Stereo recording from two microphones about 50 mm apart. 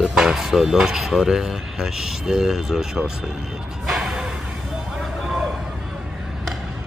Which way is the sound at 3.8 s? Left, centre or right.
Centre.